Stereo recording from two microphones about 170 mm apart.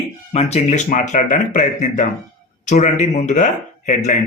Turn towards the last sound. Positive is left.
turn(degrees=45)  # may be behind; listen again after turning